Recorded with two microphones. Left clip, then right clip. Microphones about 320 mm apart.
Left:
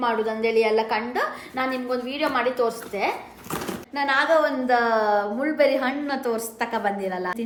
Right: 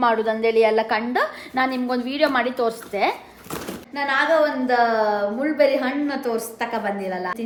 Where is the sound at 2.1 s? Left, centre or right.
Right.